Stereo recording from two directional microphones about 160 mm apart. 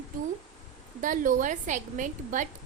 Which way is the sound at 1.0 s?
55° right (ahead or behind).